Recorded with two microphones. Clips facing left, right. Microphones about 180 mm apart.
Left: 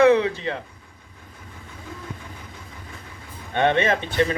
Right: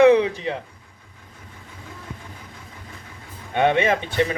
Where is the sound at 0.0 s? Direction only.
15° right (ahead or behind).